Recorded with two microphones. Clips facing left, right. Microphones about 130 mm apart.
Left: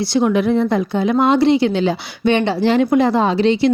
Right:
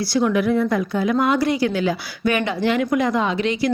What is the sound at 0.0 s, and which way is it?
A woman's voice, 25° left (ahead or behind).